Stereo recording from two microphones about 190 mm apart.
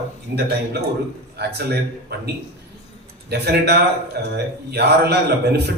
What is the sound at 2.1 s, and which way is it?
A man's voice, 60° right (ahead or behind).